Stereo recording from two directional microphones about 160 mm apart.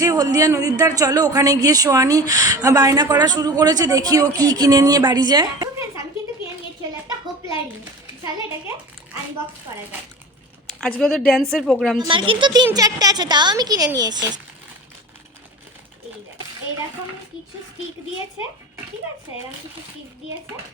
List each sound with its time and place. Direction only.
0.0 s speech: 20° right (ahead or behind)
10.7 s speech: 5° left (ahead or behind)
11.9 s speech: 30° right (ahead or behind)